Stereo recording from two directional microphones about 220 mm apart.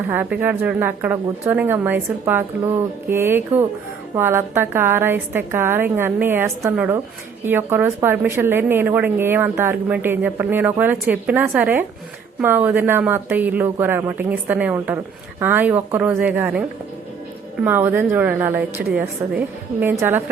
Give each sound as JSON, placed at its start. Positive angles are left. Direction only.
{"t": 0.1, "sound": "a woman's voice", "side_deg": -10}